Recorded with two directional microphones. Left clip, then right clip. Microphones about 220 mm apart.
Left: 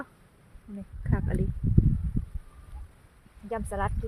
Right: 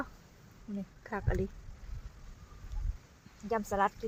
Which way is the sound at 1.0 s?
15° right (ahead or behind).